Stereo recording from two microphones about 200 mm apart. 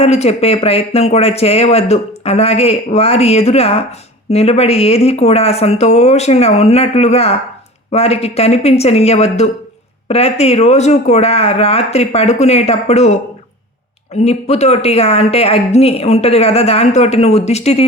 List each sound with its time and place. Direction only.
0.0 s speech: 30° left (ahead or behind)
14.2 s speech: 35° left (ahead or behind)